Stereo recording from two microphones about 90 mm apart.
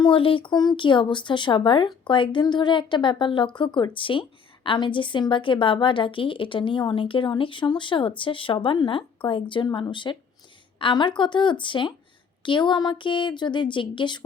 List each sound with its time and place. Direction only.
0.0 s a woman's voice: 70° left (ahead or behind)